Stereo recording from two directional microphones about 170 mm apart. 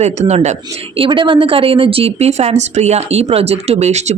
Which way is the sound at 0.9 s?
30° right (ahead or behind).